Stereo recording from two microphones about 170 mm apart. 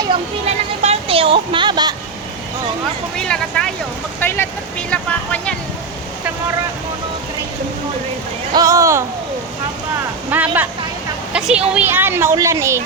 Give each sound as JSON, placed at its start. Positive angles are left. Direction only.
{"t": 0.8, "sound": "a sound", "side_deg": -35}
{"t": 3.2, "sound": "speech", "side_deg": 5}
{"t": 8.5, "sound": "speech", "side_deg": -20}
{"t": 10.2, "sound": "a woman's voice", "side_deg": -10}